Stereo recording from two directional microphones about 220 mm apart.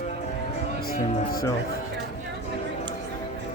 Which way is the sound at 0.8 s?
40° left (ahead or behind).